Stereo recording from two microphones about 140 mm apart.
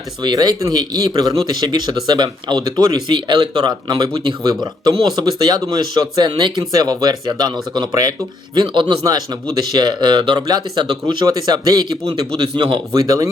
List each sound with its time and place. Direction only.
0.2 s a man's voice: 30° right (ahead or behind)
12.9 s a man's voice: 25° right (ahead or behind)